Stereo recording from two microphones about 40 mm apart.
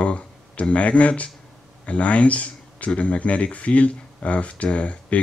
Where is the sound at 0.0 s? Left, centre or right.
Left.